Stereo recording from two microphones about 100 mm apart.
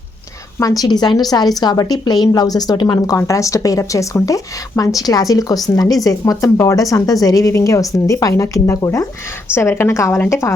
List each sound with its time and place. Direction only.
0.6 s speech: 35° left (ahead or behind)
3.2 s a woman's voice: 35° left (ahead or behind)